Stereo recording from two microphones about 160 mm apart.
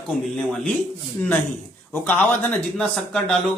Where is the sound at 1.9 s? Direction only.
10° left (ahead or behind).